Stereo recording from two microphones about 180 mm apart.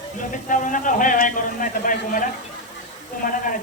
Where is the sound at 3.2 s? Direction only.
50° left (ahead or behind).